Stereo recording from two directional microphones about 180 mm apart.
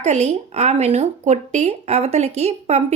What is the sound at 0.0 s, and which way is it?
Speech, 40° right (ahead or behind).